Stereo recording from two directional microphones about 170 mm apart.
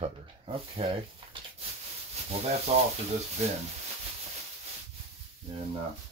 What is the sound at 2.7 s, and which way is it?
Speech, 40° right (ahead or behind).